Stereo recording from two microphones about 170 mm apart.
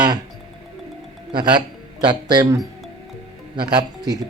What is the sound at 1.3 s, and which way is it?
Speech, 25° right (ahead or behind).